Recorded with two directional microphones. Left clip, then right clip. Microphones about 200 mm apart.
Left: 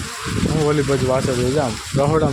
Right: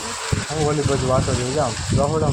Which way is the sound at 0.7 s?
45° left (ahead or behind).